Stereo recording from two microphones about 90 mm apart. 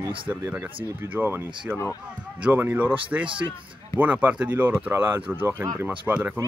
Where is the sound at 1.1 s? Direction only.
20° right (ahead or behind).